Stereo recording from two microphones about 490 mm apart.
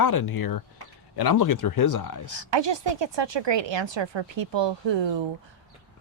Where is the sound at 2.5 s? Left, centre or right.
Right.